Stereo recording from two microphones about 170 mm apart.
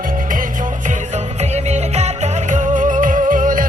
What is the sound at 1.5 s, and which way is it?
Music, 40° right (ahead or behind).